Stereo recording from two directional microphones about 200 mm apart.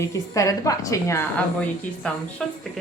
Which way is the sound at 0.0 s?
15° left (ahead or behind).